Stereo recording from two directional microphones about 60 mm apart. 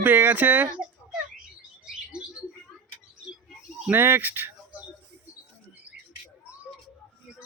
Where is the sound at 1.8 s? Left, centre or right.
Centre.